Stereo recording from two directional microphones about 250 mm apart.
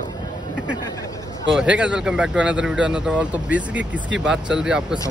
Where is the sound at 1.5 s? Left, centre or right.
Centre.